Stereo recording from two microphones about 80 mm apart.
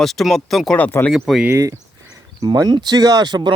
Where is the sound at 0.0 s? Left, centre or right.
Centre.